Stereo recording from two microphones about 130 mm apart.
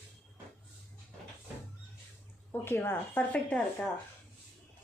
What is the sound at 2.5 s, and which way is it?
Speech, 15° left (ahead or behind).